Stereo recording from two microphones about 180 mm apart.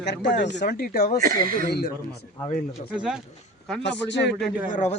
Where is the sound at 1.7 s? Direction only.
60° left (ahead or behind).